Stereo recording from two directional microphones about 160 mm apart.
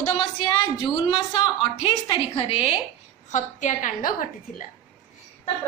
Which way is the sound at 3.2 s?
50° left (ahead or behind).